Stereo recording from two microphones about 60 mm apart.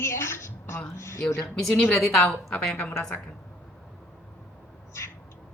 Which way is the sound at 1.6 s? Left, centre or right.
Centre.